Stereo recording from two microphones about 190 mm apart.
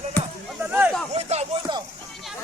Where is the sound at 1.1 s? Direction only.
35° right (ahead or behind).